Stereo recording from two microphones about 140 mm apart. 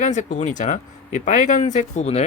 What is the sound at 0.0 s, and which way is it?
Speech, 60° left (ahead or behind).